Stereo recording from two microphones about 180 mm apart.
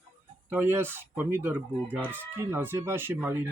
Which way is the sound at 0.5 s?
10° right (ahead or behind).